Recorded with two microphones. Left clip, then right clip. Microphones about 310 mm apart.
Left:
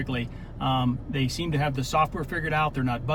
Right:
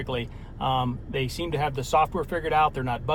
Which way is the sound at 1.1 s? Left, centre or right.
Centre.